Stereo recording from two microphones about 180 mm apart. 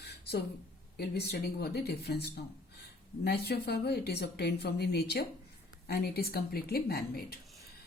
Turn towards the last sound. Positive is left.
turn(degrees=60)  # may be behind; listen again after turning